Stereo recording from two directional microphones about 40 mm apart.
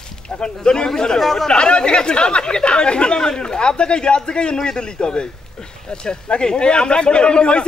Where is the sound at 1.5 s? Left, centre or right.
Left.